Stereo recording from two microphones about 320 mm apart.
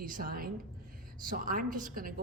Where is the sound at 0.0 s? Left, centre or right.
Right.